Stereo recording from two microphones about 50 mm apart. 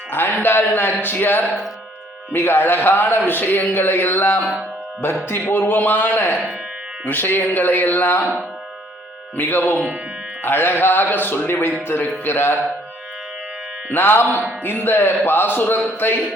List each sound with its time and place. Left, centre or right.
0.1 s a man's voice: left
9.3 s a man's voice: left
13.9 s a man's voice: left